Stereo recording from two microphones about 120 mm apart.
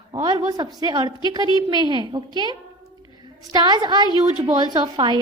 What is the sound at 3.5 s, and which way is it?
A woman's voice, 35° right (ahead or behind).